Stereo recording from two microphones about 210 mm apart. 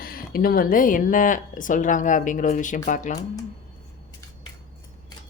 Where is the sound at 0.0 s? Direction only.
45° left (ahead or behind).